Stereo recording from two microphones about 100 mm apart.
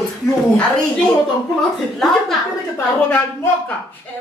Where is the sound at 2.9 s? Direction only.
15° left (ahead or behind).